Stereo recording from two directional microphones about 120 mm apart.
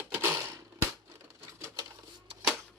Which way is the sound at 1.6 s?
25° right (ahead or behind).